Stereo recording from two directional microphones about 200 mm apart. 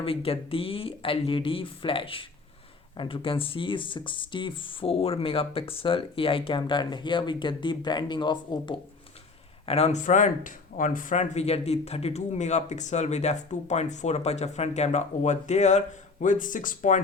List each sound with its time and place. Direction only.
0.0 s speech: 30° left (ahead or behind)